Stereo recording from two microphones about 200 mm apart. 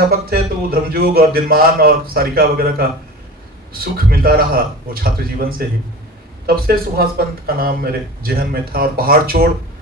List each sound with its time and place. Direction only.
0.3 s a man's voice: 50° right (ahead or behind)